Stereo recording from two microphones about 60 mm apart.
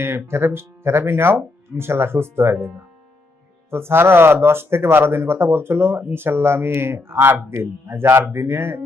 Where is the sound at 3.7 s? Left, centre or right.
Right.